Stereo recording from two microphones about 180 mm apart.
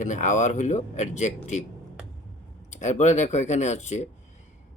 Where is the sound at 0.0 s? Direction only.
45° left (ahead or behind).